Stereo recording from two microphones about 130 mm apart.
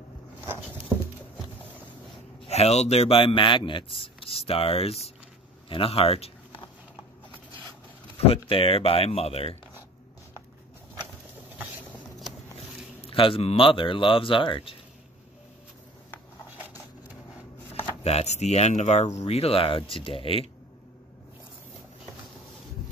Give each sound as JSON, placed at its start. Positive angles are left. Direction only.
{"t": 2.4, "sound": "a man's voice", "side_deg": 55}
{"t": 8.5, "sound": "a man's voice", "side_deg": 45}
{"t": 13.0, "sound": "a man's voice", "side_deg": 45}
{"t": 18.0, "sound": "a man's voice", "side_deg": 55}